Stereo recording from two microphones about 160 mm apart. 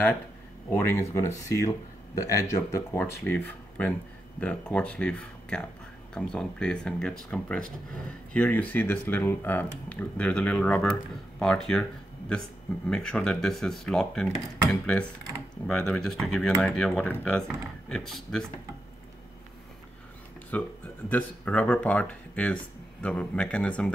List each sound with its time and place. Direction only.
0.7 s speech: 15° left (ahead or behind)
12.9 s speech: 5° left (ahead or behind)
20.5 s speech: 10° left (ahead or behind)